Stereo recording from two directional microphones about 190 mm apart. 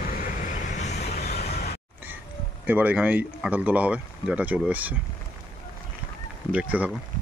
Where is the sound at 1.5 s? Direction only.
55° left (ahead or behind).